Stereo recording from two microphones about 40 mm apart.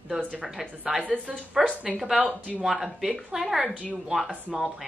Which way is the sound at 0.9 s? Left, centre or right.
Centre.